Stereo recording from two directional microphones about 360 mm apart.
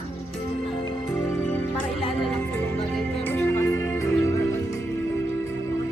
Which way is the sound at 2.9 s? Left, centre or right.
Centre.